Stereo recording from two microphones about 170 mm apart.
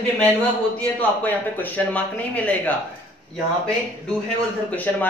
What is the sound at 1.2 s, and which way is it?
Speech, 10° left (ahead or behind).